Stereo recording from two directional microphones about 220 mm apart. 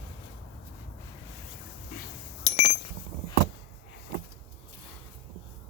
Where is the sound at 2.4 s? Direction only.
30° left (ahead or behind).